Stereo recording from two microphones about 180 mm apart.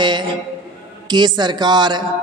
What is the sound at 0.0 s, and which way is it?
Speech, 25° right (ahead or behind).